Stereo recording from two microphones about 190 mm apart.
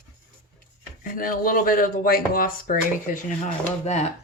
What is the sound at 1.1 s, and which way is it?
Speech, 50° left (ahead or behind).